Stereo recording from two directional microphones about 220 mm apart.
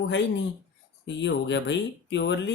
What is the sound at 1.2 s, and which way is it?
Speech, 55° left (ahead or behind).